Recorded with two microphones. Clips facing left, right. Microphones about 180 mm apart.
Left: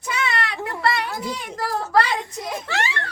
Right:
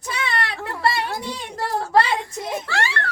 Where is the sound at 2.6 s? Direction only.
20° left (ahead or behind).